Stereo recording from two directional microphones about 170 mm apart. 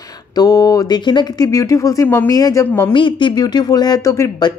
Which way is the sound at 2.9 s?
30° left (ahead or behind).